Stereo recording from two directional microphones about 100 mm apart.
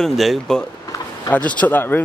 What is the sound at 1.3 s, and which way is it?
Speech, 15° left (ahead or behind).